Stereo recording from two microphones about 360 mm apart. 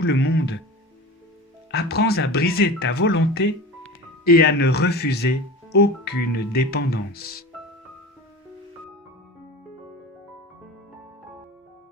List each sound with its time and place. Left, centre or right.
0.0 s speech: left
1.7 s speech: left